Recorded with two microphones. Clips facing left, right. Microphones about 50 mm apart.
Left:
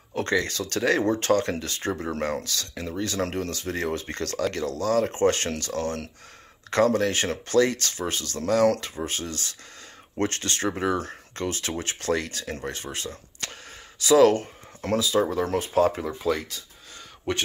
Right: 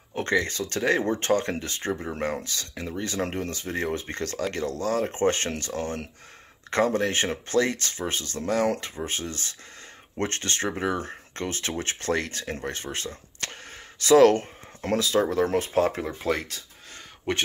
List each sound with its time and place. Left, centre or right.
0.1 s speech: right
2.1 s speech: centre
2.4 s speech: right